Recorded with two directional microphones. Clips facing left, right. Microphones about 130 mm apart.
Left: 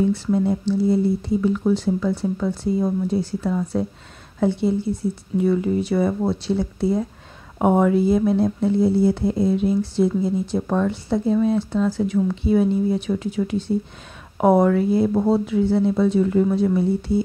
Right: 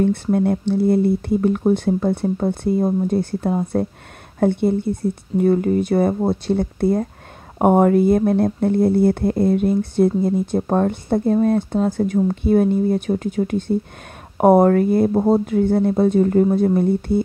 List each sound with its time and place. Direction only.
0.0 s speech: 60° right (ahead or behind)